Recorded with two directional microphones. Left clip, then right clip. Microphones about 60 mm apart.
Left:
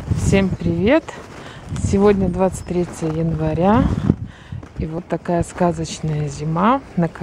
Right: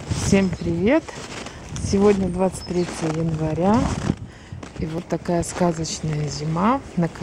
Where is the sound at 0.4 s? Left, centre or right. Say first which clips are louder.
Left 3 dB; left.